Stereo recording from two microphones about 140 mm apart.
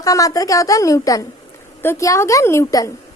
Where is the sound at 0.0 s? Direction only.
25° left (ahead or behind).